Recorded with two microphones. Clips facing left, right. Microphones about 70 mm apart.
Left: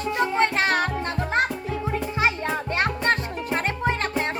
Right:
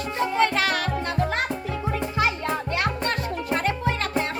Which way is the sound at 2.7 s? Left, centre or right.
Left.